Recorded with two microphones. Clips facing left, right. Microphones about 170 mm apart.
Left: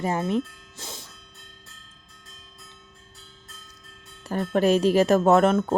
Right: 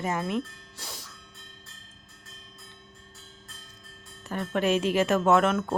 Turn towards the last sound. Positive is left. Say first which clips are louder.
# left 4 dB
turn(degrees=35)  # may be behind; listen again after turning